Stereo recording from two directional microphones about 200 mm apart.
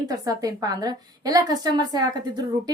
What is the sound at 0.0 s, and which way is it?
A woman's voice, 20° right (ahead or behind).